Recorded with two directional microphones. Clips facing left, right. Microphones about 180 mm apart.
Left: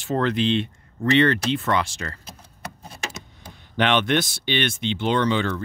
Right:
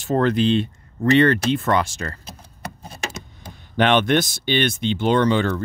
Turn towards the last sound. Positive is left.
turn(degrees=-45)  # may be behind; listen again after turning